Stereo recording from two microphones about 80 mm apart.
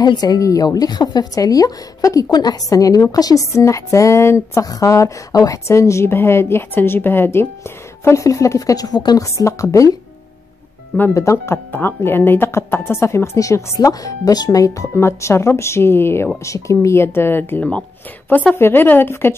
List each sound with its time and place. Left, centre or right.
0.0 s a woman's voice: left
1.3 s a woman's voice: left
3.5 s a woman's voice: left
9.2 s a woman's voice: left
11.1 s speech: left